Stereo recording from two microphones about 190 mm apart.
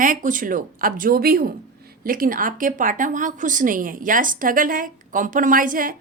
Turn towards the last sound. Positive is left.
turn(degrees=-45)  # may be behind; listen again after turning